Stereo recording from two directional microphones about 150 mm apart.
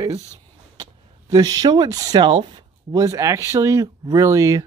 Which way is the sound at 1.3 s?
25° right (ahead or behind).